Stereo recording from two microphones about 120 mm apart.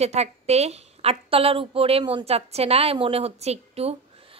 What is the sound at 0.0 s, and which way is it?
A woman's voice, 65° right (ahead or behind).